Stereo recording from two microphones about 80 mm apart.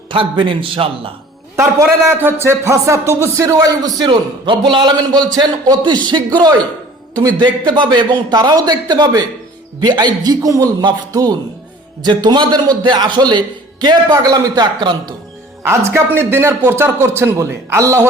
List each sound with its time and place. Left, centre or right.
0.1 s a man's voice: right
1.5 s a man's voice: right
4.0 s a man's voice: right
10.2 s a man's voice: right
12.0 s speech: right
15.7 s a man's voice: right